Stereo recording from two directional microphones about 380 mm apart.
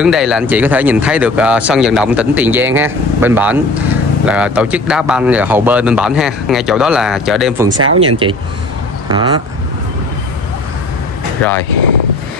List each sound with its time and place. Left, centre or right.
0.0 s speech: centre
7.7 s speech: right
9.1 s speech: centre